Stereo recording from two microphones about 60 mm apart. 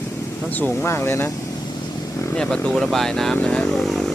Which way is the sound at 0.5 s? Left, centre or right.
Left.